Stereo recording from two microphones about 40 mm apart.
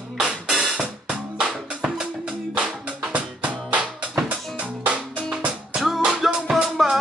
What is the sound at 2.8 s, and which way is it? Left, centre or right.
Music, right.